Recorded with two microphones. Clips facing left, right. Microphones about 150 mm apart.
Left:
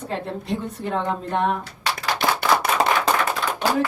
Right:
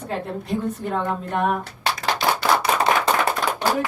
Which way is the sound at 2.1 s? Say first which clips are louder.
Left 1 dB; 55° left (ahead or behind).